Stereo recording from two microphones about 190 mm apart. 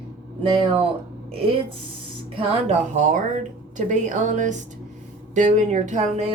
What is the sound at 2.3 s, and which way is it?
A woman's voice, 40° right (ahead or behind).